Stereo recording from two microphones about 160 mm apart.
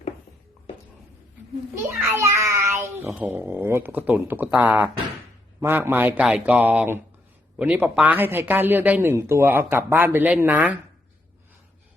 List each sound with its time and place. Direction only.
2.1 s child singing: 20° right (ahead or behind)
3.2 s speech: 5° right (ahead or behind)